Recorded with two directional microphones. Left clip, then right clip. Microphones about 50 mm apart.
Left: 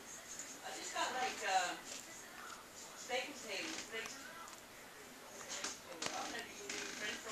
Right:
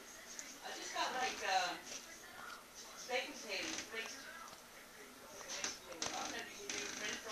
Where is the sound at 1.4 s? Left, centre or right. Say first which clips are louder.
Left 1 dB; centre.